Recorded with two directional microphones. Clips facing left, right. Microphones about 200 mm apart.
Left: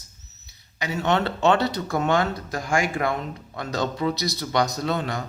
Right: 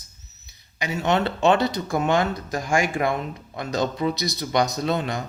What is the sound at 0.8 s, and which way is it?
Speech, 15° right (ahead or behind).